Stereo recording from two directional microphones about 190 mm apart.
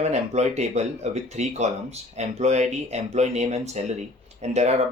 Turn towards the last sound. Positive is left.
turn(degrees=-35)  # may be behind; listen again after turning